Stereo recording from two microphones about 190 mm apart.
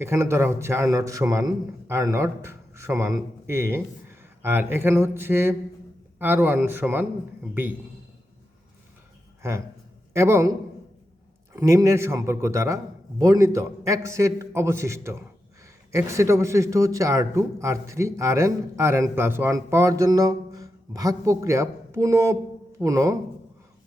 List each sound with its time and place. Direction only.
0.0 s a man's voice: 15° right (ahead or behind)
9.4 s a man's voice: 15° right (ahead or behind)
11.5 s a man's voice: 15° right (ahead or behind)